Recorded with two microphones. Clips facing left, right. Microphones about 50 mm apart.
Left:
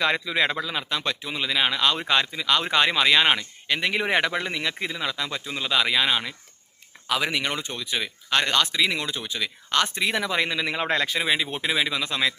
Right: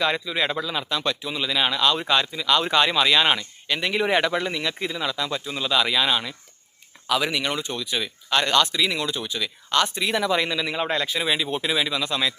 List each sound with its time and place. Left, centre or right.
0.0 s a man's voice: left
0.6 s speech: left
10.7 s a man's voice: left
11.2 s speech: left